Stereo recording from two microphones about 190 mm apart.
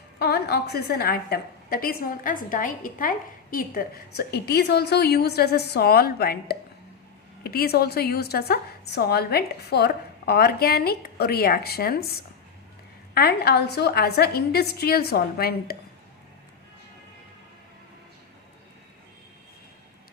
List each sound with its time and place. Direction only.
0.2 s a woman's voice: 60° left (ahead or behind)
13.1 s a woman's voice: 55° left (ahead or behind)